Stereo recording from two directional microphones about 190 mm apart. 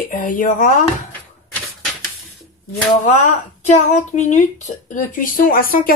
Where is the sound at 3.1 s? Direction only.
40° left (ahead or behind).